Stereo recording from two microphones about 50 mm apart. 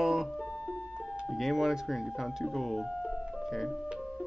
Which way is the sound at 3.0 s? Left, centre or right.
Centre.